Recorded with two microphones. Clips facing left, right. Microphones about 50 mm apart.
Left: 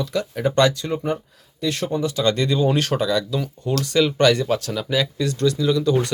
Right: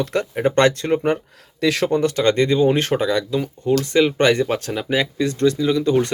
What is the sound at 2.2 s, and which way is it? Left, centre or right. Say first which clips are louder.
Speech: right 3 dB; right.